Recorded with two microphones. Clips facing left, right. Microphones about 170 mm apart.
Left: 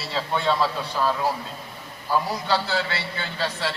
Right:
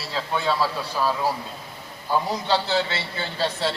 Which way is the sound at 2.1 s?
25° right (ahead or behind).